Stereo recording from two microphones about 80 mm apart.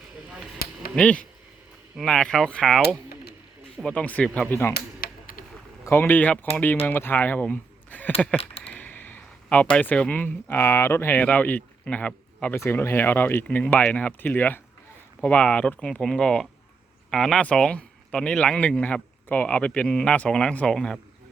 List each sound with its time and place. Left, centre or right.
0.9 s speech: centre
3.8 s speech: centre
4.4 s speech: left
5.8 s speech: left
12.5 s speech: left; by 21.0 s centre